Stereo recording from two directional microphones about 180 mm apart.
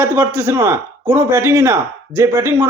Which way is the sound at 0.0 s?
10° right (ahead or behind).